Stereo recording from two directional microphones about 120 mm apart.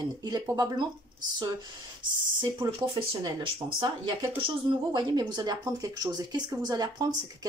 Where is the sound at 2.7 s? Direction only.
45° right (ahead or behind).